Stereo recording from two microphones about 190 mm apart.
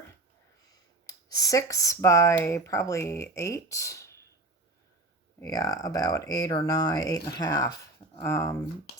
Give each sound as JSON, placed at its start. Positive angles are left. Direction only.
{"t": 1.0, "sound": "speech", "side_deg": 20}
{"t": 5.4, "sound": "speech", "side_deg": 15}